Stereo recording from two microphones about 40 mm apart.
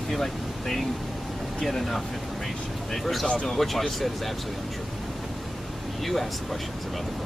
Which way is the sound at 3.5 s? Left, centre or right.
Centre.